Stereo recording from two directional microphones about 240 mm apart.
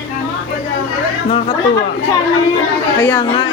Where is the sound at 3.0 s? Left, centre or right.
Centre.